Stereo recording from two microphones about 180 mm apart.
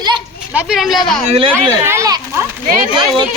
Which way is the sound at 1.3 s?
30° right (ahead or behind).